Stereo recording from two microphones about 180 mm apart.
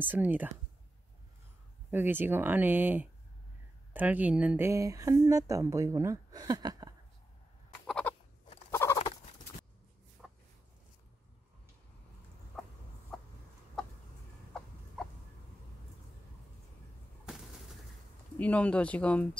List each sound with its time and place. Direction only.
0.0 s speech: 10° right (ahead or behind)
1.9 s speech: 10° right (ahead or behind)
7.8 s chicken: 5° left (ahead or behind)
10.2 s chicken: centre (ahead or behind)
12.6 s a sound: 5° left (ahead or behind)
13.1 s chicken: 5° left (ahead or behind)
15.0 s a sound: centre (ahead or behind)
17.3 s bird: 5° right (ahead or behind)
18.4 s speech: 5° left (ahead or behind)